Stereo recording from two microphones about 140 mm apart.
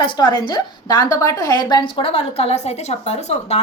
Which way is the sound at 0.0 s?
35° left (ahead or behind).